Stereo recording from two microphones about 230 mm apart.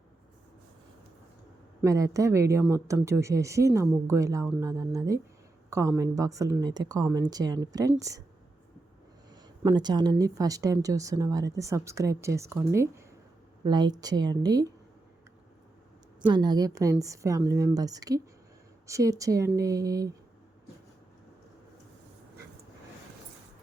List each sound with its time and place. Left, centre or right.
1.8 s speech: centre
9.3 s speech: centre
16.3 s speech: centre